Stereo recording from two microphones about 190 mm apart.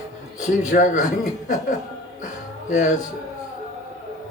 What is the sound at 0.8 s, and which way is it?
Speech, 45° left (ahead or behind).